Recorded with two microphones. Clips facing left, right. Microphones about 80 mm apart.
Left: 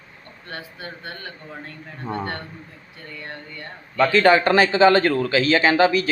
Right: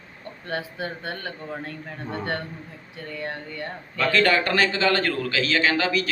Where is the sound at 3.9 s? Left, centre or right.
Left.